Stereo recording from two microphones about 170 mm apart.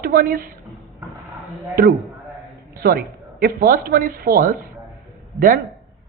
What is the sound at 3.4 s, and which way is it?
A man's voice, 60° right (ahead or behind).